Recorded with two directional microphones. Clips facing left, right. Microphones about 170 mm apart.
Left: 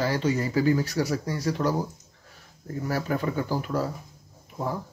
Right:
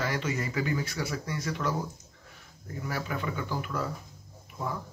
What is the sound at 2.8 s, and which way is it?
Speech, 40° left (ahead or behind).